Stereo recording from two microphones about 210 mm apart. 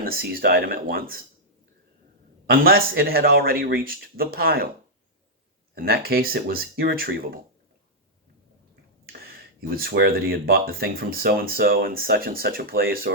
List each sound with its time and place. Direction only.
0.0 s speech: 45° right (ahead or behind)
2.5 s speech: 45° right (ahead or behind)
5.7 s speech: 45° right (ahead or behind)
9.3 s speech: 45° right (ahead or behind)